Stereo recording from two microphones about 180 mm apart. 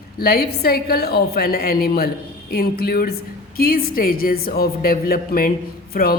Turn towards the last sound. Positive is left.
turn(degrees=55)  # may be behind; listen again after turning